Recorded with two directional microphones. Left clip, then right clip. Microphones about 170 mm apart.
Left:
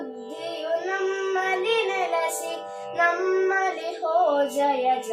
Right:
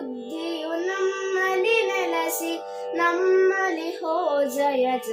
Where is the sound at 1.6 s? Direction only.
40° right (ahead or behind).